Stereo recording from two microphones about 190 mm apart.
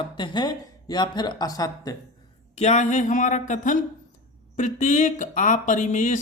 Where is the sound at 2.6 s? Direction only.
40° left (ahead or behind).